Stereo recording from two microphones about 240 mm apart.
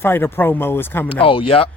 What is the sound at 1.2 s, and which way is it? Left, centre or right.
Speech, left.